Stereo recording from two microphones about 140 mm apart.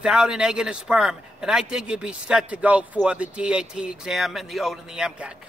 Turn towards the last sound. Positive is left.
turn(degrees=-5)  # may be behind; listen again after turning